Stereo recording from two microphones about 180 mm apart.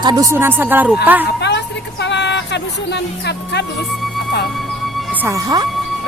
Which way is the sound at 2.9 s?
70° left (ahead or behind).